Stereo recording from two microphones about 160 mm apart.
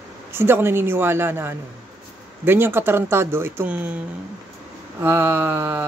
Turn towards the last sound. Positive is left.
turn(degrees=-10)  # may be behind; listen again after turning